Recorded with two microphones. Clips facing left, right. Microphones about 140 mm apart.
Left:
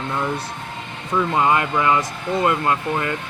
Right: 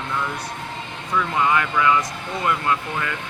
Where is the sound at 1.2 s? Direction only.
30° left (ahead or behind).